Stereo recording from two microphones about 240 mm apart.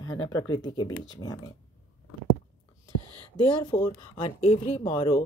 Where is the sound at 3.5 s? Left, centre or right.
Centre.